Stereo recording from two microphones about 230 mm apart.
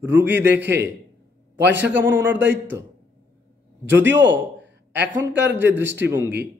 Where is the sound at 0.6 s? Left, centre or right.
Right.